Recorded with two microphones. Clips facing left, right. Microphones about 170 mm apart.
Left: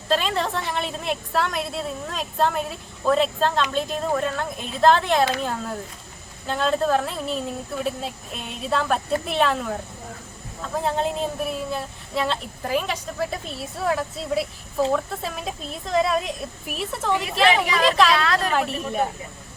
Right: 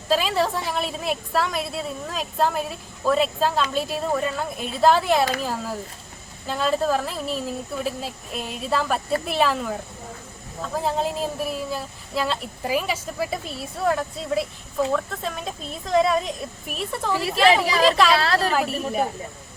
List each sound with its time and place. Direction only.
0.1 s a woman's voice: 5° right (ahead or behind)
10.8 s a woman's voice: centre (ahead or behind)
17.5 s a woman's voice: 35° right (ahead or behind)
17.8 s a woman's voice: centre (ahead or behind)
18.1 s a woman's voice: 30° right (ahead or behind)
18.5 s a woman's voice: centre (ahead or behind)